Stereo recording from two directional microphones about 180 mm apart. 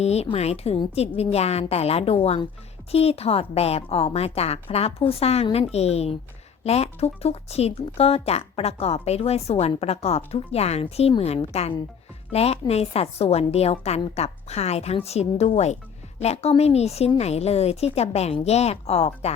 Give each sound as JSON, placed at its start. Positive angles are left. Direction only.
{"t": 0.0, "sound": "speech", "side_deg": 35}